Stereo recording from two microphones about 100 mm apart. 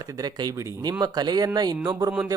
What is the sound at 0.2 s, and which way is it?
Speech, 40° right (ahead or behind).